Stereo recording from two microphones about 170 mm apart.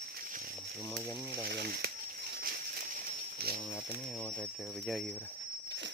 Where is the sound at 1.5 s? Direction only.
65° right (ahead or behind).